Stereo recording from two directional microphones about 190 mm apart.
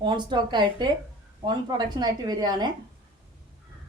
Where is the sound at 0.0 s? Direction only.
25° right (ahead or behind).